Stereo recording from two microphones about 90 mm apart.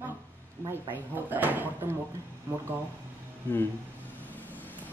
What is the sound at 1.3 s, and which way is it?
Speech, 20° right (ahead or behind).